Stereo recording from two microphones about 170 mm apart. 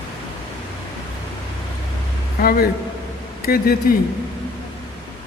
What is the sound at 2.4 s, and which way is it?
Speech, 65° left (ahead or behind).